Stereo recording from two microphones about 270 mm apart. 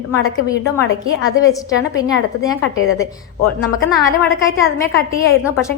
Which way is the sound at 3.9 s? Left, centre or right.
Centre.